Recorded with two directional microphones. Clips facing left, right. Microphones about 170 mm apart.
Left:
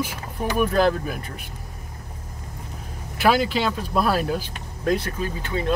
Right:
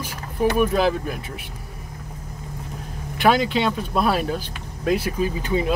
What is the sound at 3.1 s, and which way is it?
Speech, 5° left (ahead or behind).